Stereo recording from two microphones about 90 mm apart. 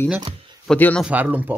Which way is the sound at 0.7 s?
5° left (ahead or behind).